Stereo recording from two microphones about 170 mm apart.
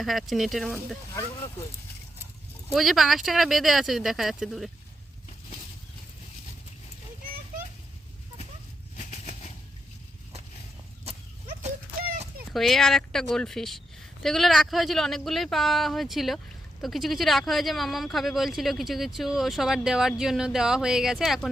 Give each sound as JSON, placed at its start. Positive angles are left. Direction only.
{"t": 0.0, "sound": "speech", "side_deg": 0}
{"t": 2.7, "sound": "speech", "side_deg": 0}
{"t": 9.0, "sound": "a sound", "side_deg": 40}
{"t": 12.5, "sound": "speech", "side_deg": 0}